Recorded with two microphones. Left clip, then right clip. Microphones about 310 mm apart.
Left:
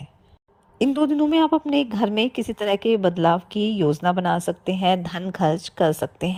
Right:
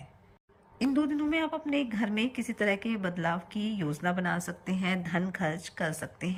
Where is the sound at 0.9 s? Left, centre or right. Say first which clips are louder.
Left 10 dB; centre.